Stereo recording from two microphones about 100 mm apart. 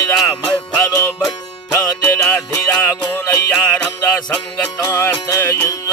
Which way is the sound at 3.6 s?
10° left (ahead or behind).